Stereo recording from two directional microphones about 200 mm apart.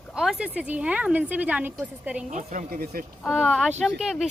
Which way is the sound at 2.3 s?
40° right (ahead or behind).